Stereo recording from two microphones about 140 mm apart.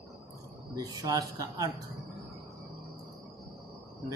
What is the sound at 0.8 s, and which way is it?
Speech, 25° right (ahead or behind).